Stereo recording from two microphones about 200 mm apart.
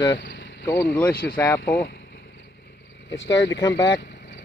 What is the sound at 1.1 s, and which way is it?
Speech, 45° left (ahead or behind).